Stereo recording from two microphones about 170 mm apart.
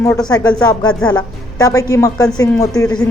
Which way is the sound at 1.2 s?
20° left (ahead or behind).